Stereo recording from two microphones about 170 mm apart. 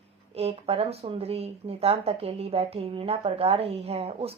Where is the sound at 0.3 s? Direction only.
35° right (ahead or behind).